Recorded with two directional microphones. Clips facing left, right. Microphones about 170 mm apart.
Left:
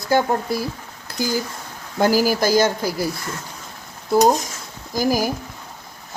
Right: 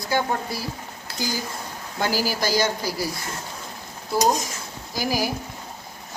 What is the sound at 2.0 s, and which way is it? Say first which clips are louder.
Speech: left 7 dB; 50° left (ahead or behind).